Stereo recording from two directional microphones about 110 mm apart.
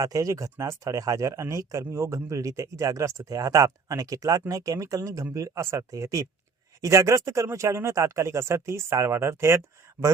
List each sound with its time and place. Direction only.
0.0 s speech: 30° right (ahead or behind)